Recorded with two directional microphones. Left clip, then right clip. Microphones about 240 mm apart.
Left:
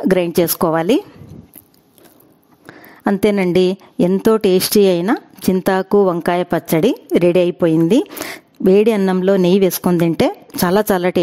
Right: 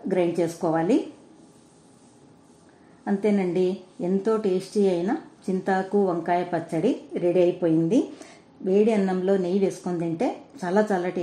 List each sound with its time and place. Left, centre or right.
0.1 s speech: left
3.0 s speech: left